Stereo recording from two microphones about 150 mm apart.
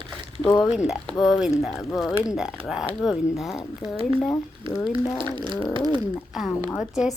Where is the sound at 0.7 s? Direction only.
5° right (ahead or behind).